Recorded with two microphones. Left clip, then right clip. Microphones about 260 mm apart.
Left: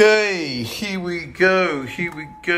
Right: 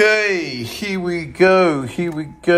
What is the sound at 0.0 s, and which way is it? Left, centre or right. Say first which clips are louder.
Speech: even; centre.